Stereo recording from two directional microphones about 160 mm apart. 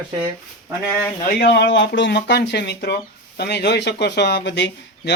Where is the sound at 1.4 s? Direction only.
90° left.